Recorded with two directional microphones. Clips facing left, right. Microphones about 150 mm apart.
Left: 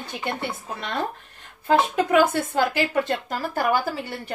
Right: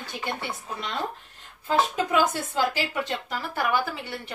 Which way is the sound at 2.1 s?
55° left (ahead or behind).